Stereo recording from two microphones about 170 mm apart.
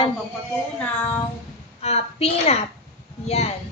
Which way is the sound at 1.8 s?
40° left (ahead or behind).